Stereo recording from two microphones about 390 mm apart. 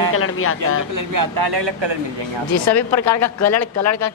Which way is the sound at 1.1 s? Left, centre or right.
Right.